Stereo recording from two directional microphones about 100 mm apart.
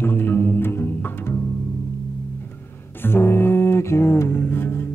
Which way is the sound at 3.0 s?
25° left (ahead or behind).